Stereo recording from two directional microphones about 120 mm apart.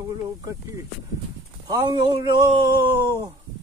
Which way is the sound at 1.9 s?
35° right (ahead or behind).